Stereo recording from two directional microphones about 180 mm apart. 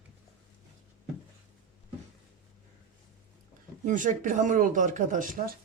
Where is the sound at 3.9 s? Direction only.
45° right (ahead or behind).